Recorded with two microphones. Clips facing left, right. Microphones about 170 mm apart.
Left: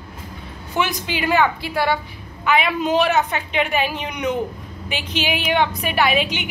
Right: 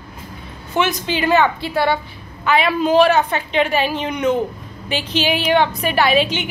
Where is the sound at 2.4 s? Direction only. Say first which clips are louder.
Right 3 dB; 15° left (ahead or behind).